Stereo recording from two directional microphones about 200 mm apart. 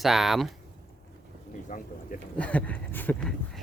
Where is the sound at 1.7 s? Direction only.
40° left (ahead or behind).